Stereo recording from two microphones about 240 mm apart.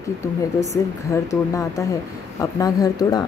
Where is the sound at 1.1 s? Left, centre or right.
Centre.